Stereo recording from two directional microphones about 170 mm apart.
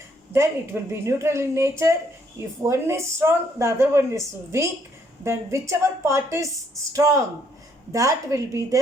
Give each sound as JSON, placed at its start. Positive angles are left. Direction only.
{"t": 0.3, "sound": "a woman's voice", "side_deg": -15}